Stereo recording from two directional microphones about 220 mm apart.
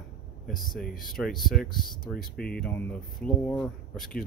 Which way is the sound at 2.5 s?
5° left (ahead or behind).